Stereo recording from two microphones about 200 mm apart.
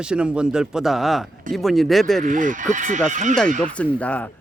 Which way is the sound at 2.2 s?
40° right (ahead or behind).